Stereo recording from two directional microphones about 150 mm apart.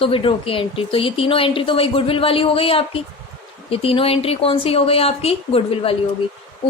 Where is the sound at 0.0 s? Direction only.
35° left (ahead or behind).